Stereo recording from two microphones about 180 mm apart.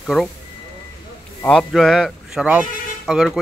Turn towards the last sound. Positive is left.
turn(degrees=-5)  # may be behind; listen again after turning